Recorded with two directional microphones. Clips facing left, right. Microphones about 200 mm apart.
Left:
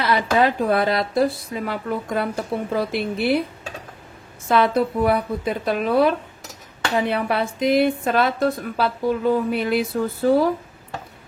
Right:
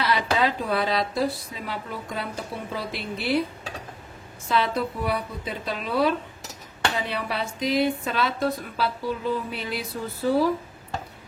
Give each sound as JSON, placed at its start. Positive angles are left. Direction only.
{"t": 0.0, "sound": "speech", "side_deg": 50}
{"t": 4.5, "sound": "a woman's voice", "side_deg": 55}